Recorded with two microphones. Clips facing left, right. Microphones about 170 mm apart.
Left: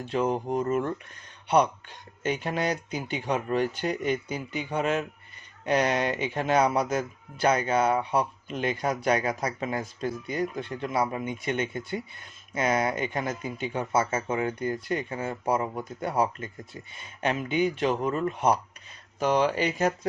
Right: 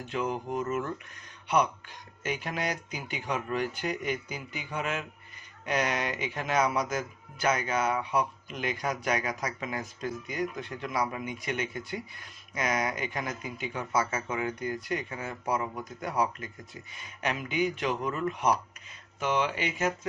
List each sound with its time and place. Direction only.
0.1 s speech: 30° left (ahead or behind)